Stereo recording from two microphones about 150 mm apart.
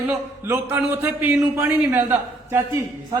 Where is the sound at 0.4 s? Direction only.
15° right (ahead or behind).